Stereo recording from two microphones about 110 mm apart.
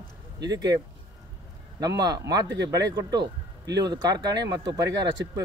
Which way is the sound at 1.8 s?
35° right (ahead or behind).